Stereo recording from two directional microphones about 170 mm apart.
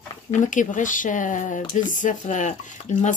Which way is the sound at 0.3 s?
50° left (ahead or behind).